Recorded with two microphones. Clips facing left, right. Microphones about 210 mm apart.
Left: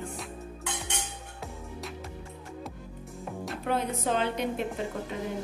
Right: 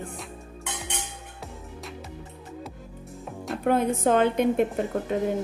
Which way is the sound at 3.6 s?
50° right (ahead or behind).